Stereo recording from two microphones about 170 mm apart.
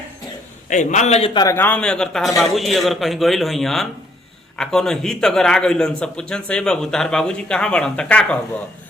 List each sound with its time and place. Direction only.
0.7 s a man's voice: 45° left (ahead or behind); by 1.5 s 25° left (ahead or behind)
1.5 s a man's voice: 10° left (ahead or behind)